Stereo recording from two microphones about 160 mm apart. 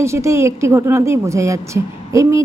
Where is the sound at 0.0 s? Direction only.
15° right (ahead or behind).